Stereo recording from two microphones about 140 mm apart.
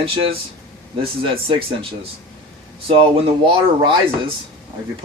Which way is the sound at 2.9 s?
40° right (ahead or behind).